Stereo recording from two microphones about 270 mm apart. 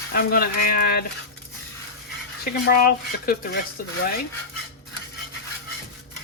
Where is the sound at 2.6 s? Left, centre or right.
Left.